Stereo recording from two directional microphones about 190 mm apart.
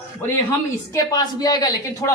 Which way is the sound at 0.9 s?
20° left (ahead or behind).